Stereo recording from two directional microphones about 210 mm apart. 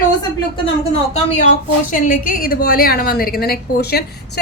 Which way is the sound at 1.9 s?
40° left (ahead or behind).